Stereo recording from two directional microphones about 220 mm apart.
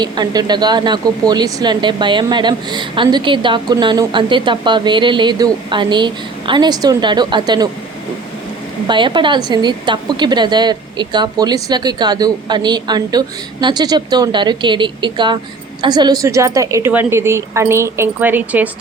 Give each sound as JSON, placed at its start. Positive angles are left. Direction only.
{"t": 0.0, "sound": "a woman's voice", "side_deg": -20}
{"t": 8.9, "sound": "a woman's voice", "side_deg": -20}